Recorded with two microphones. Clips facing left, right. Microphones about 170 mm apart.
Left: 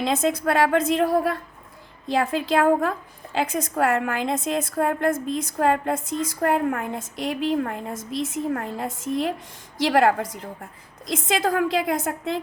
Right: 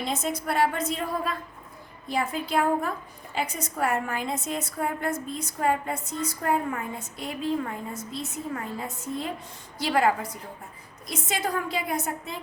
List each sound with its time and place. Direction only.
0.0 s a woman's voice: 90° left; by 1.4 s 70° left (ahead or behind)
2.0 s a woman's voice: 90° left
4.7 s a woman's voice: 70° left (ahead or behind)
11.0 s a woman's voice: 90° left